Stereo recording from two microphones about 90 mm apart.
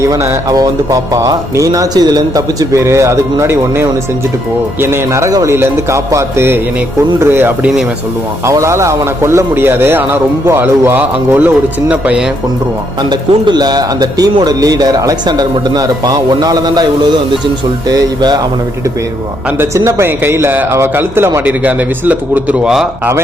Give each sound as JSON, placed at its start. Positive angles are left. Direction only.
{"t": 0.0, "sound": "a man's voice", "side_deg": -35}
{"t": 13.0, "sound": "speech", "side_deg": -55}
{"t": 19.7, "sound": "a man's voice", "side_deg": -35}